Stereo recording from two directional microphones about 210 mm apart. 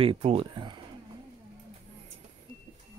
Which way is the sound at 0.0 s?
25° right (ahead or behind).